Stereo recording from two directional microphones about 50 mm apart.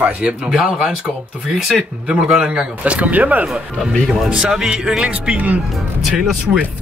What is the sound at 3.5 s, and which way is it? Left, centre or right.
Speech, centre.